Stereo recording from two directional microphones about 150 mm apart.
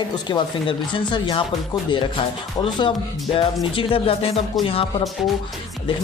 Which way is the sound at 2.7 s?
35° left (ahead or behind).